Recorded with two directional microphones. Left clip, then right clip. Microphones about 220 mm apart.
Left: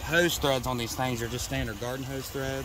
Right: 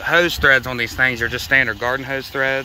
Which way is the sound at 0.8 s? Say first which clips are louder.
Right 14 dB; 20° right (ahead or behind).